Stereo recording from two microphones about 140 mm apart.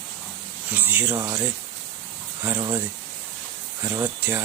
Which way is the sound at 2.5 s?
25° right (ahead or behind).